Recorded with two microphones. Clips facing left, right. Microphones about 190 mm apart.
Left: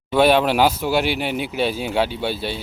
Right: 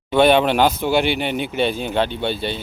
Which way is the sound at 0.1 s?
5° left (ahead or behind).